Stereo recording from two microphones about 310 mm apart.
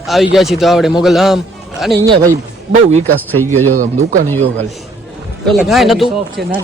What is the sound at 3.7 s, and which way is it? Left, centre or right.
Speech, right.